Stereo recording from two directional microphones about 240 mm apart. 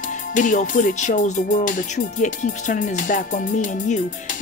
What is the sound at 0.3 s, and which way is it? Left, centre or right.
Music, left.